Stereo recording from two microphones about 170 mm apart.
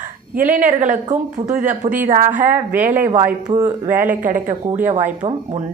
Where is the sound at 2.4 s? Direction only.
10° right (ahead or behind).